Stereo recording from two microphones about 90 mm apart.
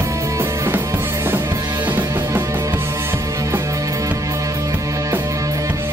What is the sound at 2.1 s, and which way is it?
Music, 35° right (ahead or behind).